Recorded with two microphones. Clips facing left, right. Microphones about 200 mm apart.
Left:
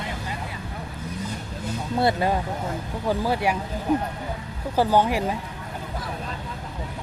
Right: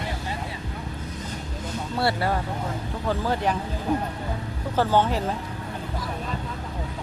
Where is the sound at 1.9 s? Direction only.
20° left (ahead or behind).